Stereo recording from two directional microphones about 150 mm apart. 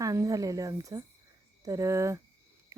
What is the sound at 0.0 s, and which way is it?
Speech, 20° right (ahead or behind).